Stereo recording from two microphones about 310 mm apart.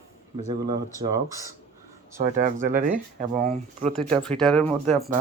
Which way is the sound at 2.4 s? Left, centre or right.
Right.